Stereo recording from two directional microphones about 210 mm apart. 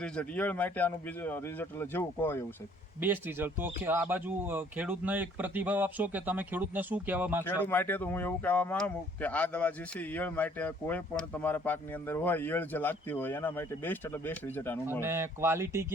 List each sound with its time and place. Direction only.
0.0 s speech: 5° left (ahead or behind)
3.0 s speech: 10° right (ahead or behind)
7.4 s speech: 10° left (ahead or behind)
15.0 s speech: 10° right (ahead or behind)